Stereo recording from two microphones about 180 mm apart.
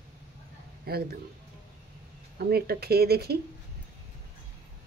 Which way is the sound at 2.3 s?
60° right (ahead or behind).